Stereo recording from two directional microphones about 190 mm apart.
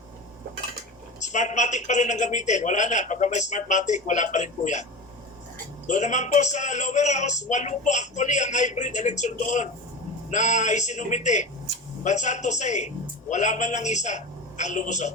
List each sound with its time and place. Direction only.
1.2 s a man's voice: 40° left (ahead or behind)
5.9 s a man's voice: 40° left (ahead or behind)